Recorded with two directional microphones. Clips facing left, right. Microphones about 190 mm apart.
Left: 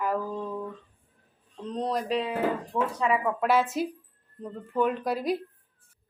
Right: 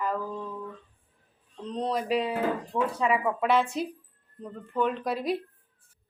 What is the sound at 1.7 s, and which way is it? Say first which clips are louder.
Speech: even; centre (ahead or behind).